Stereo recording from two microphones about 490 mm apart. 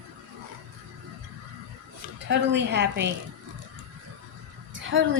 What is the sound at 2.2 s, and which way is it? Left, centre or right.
Speech, right.